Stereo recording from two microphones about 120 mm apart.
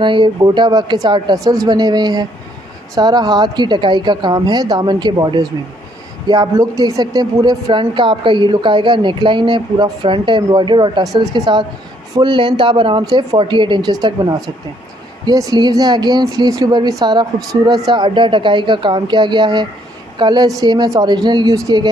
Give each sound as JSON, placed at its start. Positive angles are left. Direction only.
{"t": 0.0, "sound": "speech", "side_deg": -40}
{"t": 15.2, "sound": "speech", "side_deg": -30}